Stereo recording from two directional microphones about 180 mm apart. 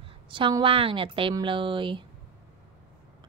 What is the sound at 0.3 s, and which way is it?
A woman's voice, 25° right (ahead or behind).